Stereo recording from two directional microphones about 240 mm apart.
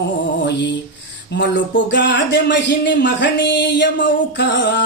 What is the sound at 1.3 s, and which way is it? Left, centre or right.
Speech, left.